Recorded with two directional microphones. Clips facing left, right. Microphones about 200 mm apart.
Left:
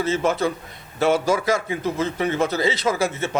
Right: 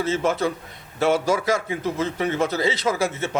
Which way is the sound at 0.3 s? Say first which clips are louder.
Left 1 dB; 15° left (ahead or behind).